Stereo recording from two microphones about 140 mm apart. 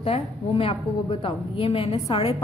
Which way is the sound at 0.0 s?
40° left (ahead or behind).